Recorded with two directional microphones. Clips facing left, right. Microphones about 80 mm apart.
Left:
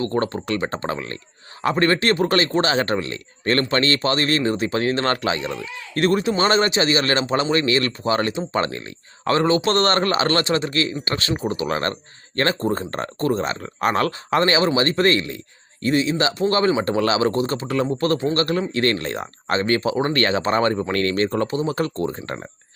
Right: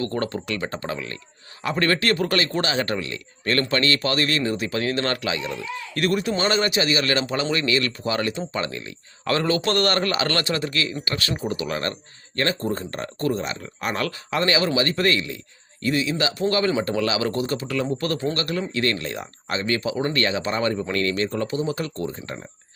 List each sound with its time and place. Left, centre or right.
0.0 s speech: left
1.7 s speech: left
9.2 s speech: left
22.0 s speech: left